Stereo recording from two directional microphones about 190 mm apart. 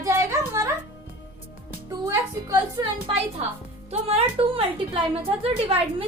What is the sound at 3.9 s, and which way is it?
A woman's voice, 30° right (ahead or behind).